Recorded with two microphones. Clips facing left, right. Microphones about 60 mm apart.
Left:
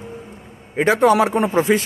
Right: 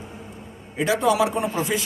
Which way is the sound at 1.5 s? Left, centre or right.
Left.